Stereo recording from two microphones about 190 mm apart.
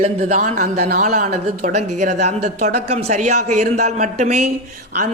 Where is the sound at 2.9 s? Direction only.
35° right (ahead or behind).